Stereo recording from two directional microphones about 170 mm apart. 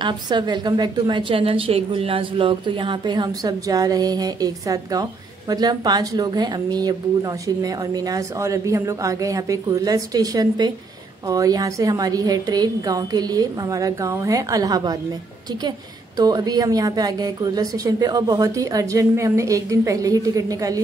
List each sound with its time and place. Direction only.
0.0 s a woman's voice: 25° right (ahead or behind)
16.2 s a woman's voice: 20° right (ahead or behind)